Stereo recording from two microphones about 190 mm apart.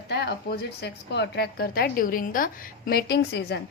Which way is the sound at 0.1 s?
60° left (ahead or behind).